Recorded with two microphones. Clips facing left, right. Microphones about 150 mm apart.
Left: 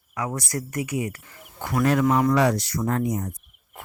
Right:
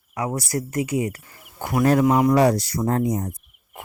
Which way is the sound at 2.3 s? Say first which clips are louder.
Right 3 dB; 35° right (ahead or behind).